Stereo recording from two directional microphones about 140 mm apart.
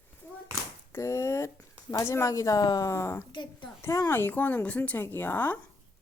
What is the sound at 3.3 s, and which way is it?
Speech, 35° left (ahead or behind).